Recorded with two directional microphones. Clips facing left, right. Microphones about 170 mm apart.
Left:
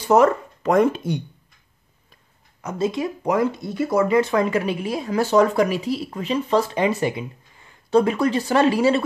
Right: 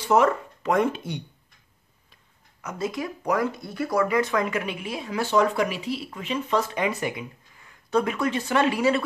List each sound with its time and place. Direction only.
0.1 s speech: 40° left (ahead or behind)
2.6 s speech: 25° left (ahead or behind)